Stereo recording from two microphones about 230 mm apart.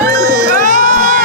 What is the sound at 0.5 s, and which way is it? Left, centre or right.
Crowd, right.